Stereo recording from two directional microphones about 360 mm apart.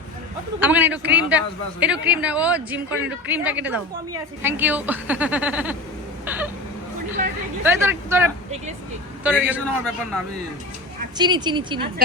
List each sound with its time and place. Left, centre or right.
0.6 s a woman's voice: centre
6.2 s a sound: centre
7.6 s a woman's voice: centre
11.2 s speech: centre